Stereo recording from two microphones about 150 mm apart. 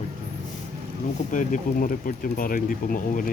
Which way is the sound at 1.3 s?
60° left (ahead or behind).